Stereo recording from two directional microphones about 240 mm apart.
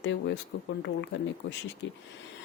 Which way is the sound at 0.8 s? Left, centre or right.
Left.